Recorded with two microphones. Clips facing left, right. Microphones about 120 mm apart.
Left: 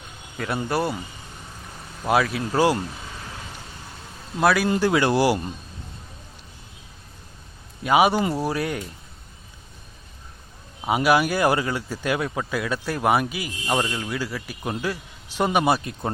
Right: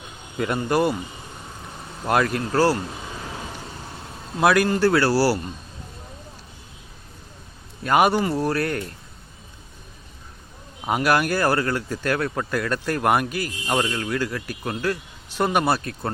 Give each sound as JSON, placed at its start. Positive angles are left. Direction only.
{"t": 0.4, "sound": "a man's voice", "side_deg": 0}
{"t": 2.0, "sound": "a man's voice", "side_deg": 5}
{"t": 4.4, "sound": "a man's voice", "side_deg": 0}
{"t": 4.7, "sound": "speech", "side_deg": 15}
{"t": 7.9, "sound": "speech", "side_deg": 10}
{"t": 10.8, "sound": "speech", "side_deg": 5}